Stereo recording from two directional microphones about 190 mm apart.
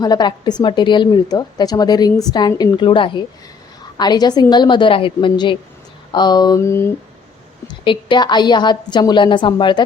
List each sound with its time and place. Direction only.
0.0 s a woman's voice: 20° left (ahead or behind)
7.9 s a woman's voice: 25° left (ahead or behind)